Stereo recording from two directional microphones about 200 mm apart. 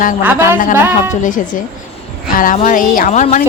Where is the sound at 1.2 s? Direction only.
40° left (ahead or behind).